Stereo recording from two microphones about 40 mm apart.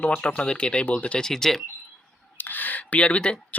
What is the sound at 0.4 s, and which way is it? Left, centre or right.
Speech, left.